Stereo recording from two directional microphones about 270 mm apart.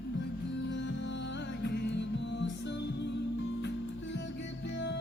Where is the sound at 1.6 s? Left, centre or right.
Left.